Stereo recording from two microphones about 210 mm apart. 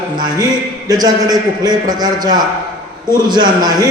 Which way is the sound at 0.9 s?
20° right (ahead or behind).